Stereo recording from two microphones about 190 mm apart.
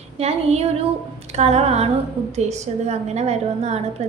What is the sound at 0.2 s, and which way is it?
A woman's voice, 35° right (ahead or behind).